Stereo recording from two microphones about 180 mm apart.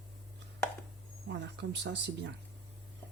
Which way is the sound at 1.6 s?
75° right (ahead or behind).